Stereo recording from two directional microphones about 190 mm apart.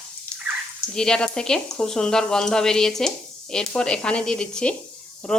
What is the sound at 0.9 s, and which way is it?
Speech, 5° left (ahead or behind).